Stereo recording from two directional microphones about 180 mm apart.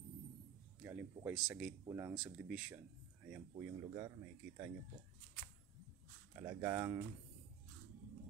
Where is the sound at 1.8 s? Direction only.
15° right (ahead or behind).